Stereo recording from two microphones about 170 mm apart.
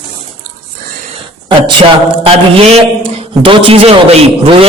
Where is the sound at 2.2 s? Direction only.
35° right (ahead or behind).